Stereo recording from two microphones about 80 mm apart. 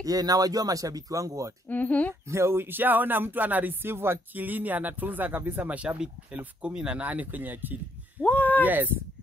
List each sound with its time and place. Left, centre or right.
0.0 s speech: right
1.7 s speech: centre
2.2 s speech: right
8.2 s speech: left
8.6 s speech: right